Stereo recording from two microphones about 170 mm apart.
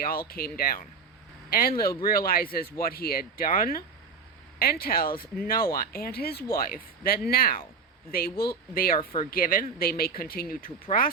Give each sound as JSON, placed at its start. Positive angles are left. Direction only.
{"t": 0.0, "sound": "speech", "side_deg": 60}